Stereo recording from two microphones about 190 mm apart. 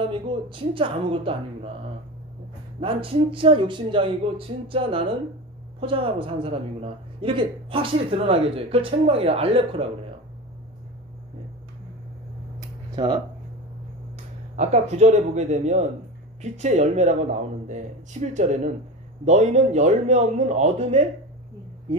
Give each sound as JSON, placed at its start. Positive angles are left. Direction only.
{"t": 0.0, "sound": "speech", "side_deg": -25}
{"t": 2.8, "sound": "speech", "side_deg": -30}
{"t": 12.9, "sound": "speech", "side_deg": -20}
{"t": 14.5, "sound": "speech", "side_deg": -35}